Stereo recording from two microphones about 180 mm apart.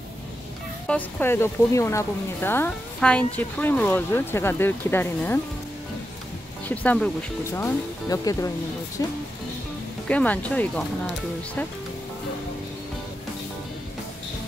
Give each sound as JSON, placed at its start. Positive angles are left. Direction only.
{"t": 0.8, "sound": "speech", "side_deg": 10}
{"t": 6.7, "sound": "speech", "side_deg": 10}